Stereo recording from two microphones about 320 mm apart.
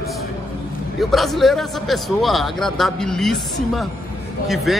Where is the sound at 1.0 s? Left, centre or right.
Centre.